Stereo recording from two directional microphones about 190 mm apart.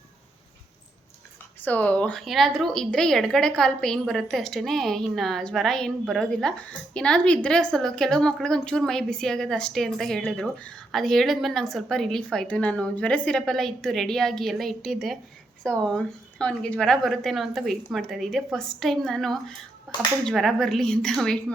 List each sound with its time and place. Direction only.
1.6 s a woman's voice: 10° left (ahead or behind)
19.9 s a sound: 5° left (ahead or behind)
20.2 s a woman's voice: centre (ahead or behind)